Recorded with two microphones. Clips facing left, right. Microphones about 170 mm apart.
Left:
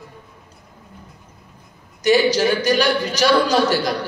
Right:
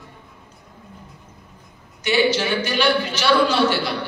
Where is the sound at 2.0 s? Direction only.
40° left (ahead or behind).